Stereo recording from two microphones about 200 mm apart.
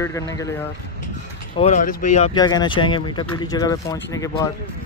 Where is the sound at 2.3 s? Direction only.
20° left (ahead or behind).